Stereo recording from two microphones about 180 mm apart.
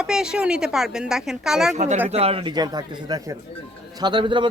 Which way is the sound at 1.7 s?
40° right (ahead or behind).